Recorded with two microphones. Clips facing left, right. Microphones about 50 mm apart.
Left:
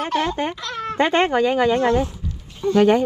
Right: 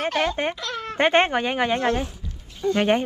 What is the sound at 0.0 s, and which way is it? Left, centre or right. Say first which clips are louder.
Speech: left 1 dB; right.